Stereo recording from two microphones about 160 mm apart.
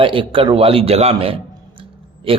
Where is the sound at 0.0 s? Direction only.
35° right (ahead or behind).